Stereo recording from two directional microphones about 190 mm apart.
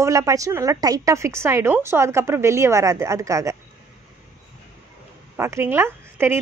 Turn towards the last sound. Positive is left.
turn(degrees=-10)  # may be behind; listen again after turning